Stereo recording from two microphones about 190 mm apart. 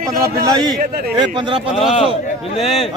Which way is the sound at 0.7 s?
55° right (ahead or behind).